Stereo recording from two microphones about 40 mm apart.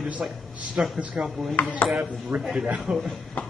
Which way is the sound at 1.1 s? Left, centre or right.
Centre.